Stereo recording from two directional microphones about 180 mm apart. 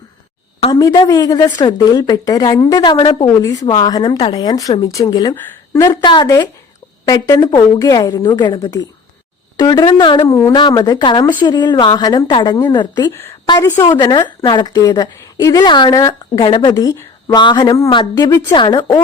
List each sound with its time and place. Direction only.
0.7 s a woman's voice: 20° left (ahead or behind)